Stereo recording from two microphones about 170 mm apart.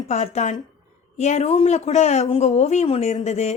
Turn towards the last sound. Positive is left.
turn(degrees=40)  # may be behind; listen again after turning